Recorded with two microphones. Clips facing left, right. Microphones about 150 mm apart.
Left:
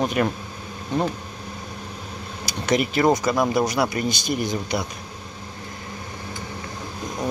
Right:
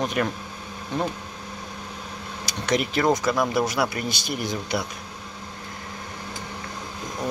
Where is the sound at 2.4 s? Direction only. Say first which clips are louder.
Left 3 dB; 5° left (ahead or behind).